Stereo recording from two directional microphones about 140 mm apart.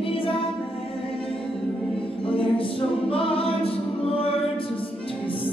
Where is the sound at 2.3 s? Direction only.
40° left (ahead or behind).